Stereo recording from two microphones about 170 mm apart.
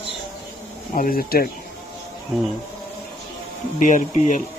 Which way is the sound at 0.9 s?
60° left (ahead or behind).